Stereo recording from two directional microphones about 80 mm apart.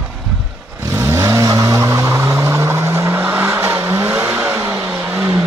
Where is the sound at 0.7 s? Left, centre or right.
Right.